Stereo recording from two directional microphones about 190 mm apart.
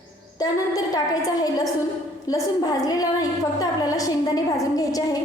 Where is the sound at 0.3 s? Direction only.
20° left (ahead or behind).